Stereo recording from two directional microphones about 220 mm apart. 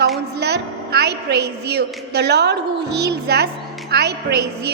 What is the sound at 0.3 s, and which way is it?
A woman's voice, 50° right (ahead or behind).